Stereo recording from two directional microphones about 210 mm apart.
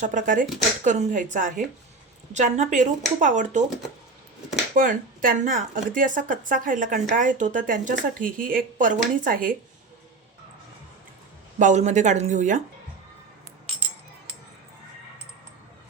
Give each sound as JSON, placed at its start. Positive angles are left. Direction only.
{"t": 0.0, "sound": "speech", "side_deg": -35}
{"t": 4.7, "sound": "speech", "side_deg": -40}
{"t": 11.6, "sound": "speech", "side_deg": -35}